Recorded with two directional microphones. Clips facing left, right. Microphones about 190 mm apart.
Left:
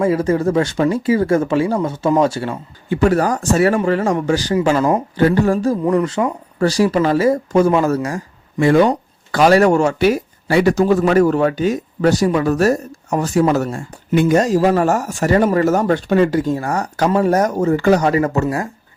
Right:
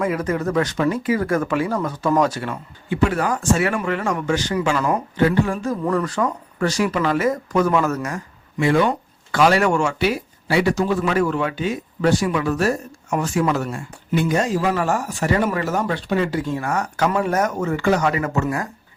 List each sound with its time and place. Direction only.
0.0 s speech: 30° left (ahead or behind)
2.9 s speech: 40° left (ahead or behind)
5.8 s speech: 20° left (ahead or behind)
6.6 s speech: 35° left (ahead or behind)